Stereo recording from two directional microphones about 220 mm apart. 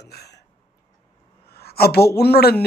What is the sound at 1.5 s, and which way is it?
Speech, 45° left (ahead or behind).